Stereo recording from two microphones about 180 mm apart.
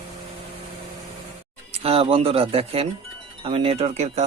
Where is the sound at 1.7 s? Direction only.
30° right (ahead or behind).